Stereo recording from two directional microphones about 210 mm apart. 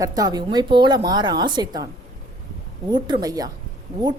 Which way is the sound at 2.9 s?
20° right (ahead or behind).